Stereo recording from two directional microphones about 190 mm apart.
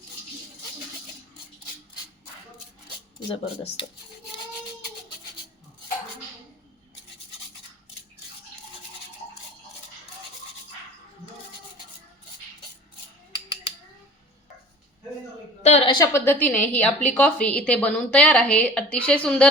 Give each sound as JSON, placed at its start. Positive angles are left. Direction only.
{"t": 3.2, "sound": "speech", "side_deg": 30}
{"t": 15.6, "sound": "a sound", "side_deg": 35}
{"t": 16.1, "sound": "a woman's voice", "side_deg": 10}